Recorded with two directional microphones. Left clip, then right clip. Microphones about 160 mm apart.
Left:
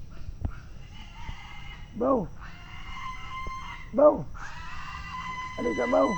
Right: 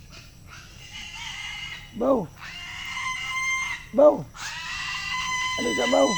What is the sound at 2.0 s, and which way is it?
Speech, 20° right (ahead or behind).